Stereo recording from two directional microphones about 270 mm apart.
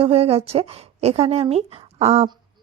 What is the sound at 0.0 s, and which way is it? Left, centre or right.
Speech, right.